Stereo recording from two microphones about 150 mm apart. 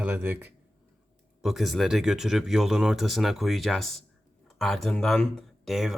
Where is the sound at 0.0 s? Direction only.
15° right (ahead or behind).